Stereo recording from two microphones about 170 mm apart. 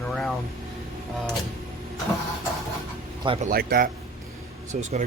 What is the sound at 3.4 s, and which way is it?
Speech, 55° right (ahead or behind).